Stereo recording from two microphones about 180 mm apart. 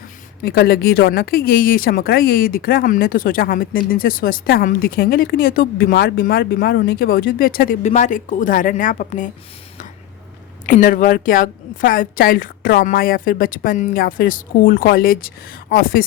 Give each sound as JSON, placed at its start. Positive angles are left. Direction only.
{"t": 0.4, "sound": "speech", "side_deg": 60}
{"t": 10.7, "sound": "speech", "side_deg": 50}